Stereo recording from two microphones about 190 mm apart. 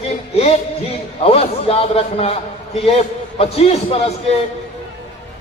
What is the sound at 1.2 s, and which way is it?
A man's voice, 30° left (ahead or behind).